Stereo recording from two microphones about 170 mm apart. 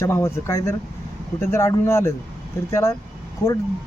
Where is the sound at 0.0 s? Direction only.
15° left (ahead or behind).